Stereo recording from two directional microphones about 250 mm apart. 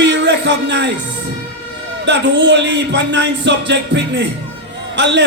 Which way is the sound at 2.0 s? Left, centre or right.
Right.